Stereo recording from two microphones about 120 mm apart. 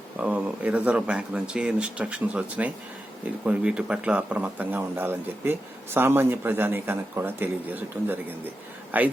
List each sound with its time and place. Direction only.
0.2 s speech: 10° right (ahead or behind)